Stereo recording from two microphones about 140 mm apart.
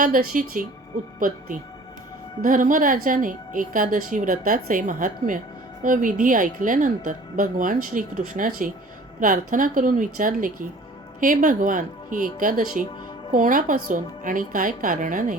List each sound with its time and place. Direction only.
0.0 s speech: 80° right
2.4 s a woman's voice: 70° right (ahead or behind)